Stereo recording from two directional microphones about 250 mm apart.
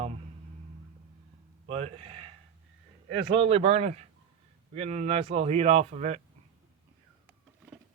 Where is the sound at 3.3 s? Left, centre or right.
Right.